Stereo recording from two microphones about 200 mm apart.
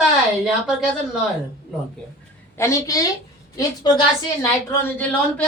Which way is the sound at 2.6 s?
15° left (ahead or behind).